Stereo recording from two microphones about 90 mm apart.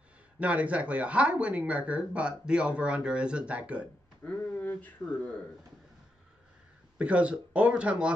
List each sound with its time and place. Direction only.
0.4 s speech: 15° right (ahead or behind)
4.2 s speech: 15° left (ahead or behind)
7.0 s speech: 10° right (ahead or behind)